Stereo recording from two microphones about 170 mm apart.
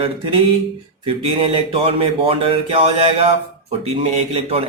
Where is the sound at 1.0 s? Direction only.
35° right (ahead or behind).